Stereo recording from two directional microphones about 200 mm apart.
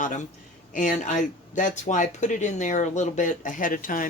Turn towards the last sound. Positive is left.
turn(degrees=40)  # may be behind; listen again after turning